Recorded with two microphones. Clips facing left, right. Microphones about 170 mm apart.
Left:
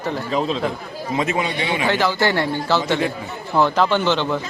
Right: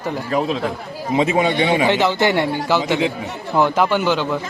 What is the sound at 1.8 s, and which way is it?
A man's voice, 20° right (ahead or behind).